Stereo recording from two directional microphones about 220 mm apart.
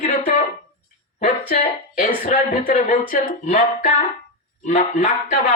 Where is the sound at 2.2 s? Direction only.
35° left (ahead or behind).